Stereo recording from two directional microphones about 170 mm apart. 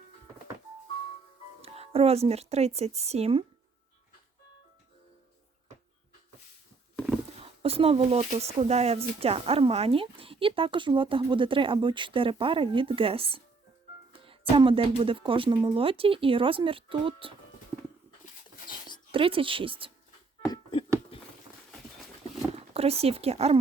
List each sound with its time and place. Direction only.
1.6 s speech: 35° right (ahead or behind)
7.3 s speech: 35° right (ahead or behind)
14.5 s speech: 30° right (ahead or behind)
19.1 s speech: 30° right (ahead or behind)
20.5 s a sound: 30° left (ahead or behind)
22.7 s speech: 35° right (ahead or behind)